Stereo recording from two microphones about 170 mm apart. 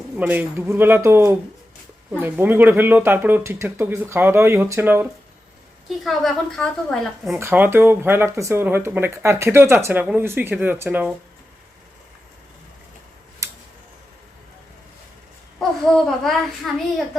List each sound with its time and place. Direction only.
0.2 s speech: 10° right (ahead or behind)
6.1 s a woman's voice: centre (ahead or behind)
7.3 s speech: 10° right (ahead or behind)
16.0 s a woman's voice: centre (ahead or behind)